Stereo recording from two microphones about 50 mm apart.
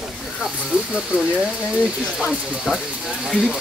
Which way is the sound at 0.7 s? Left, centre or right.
Right.